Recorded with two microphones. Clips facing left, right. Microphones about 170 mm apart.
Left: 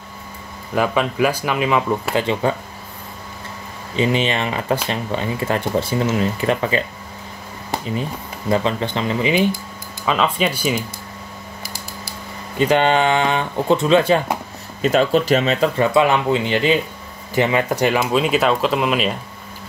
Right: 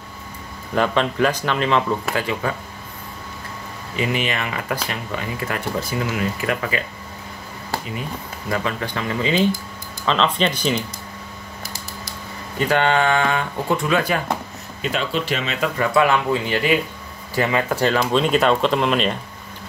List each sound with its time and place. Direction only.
0.7 s speech: 5° left (ahead or behind)
2.1 s speech: 25° left (ahead or behind)
3.9 s speech: 25° left (ahead or behind)
8.5 s speech: 25° left (ahead or behind); by 10.8 s 10° left (ahead or behind)
12.5 s speech: 20° left (ahead or behind)
14.8 s speech: 40° left (ahead or behind)
15.8 s speech: 20° left (ahead or behind); by 19.1 s 5° left (ahead or behind)